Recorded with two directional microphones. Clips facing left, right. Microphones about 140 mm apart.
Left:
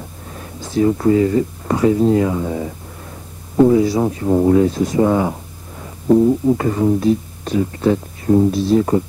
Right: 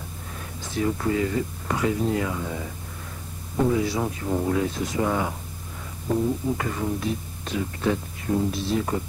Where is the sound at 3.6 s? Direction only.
35° left (ahead or behind).